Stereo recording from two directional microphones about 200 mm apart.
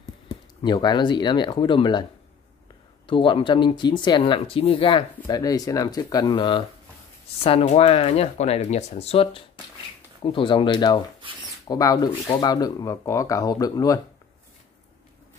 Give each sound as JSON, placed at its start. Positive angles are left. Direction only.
{"t": 0.6, "sound": "speech", "side_deg": 20}
{"t": 3.1, "sound": "speech", "side_deg": 25}